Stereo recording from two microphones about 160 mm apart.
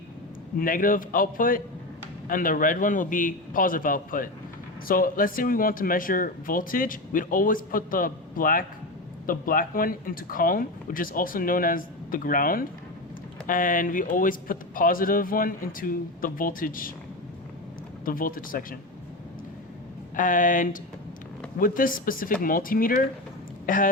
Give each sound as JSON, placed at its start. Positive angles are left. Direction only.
{"t": 0.5, "sound": "speech", "side_deg": 60}
{"t": 18.0, "sound": "speech", "side_deg": 60}
{"t": 20.1, "sound": "speech", "side_deg": 55}